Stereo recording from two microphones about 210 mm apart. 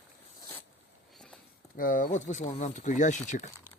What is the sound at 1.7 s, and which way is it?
Speech, 40° left (ahead or behind).